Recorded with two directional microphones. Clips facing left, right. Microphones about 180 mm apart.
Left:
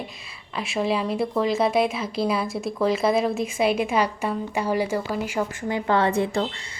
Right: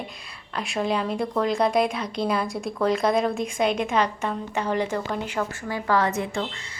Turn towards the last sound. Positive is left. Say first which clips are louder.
# left 3 dB
turn(degrees=35)  # may be behind; listen again after turning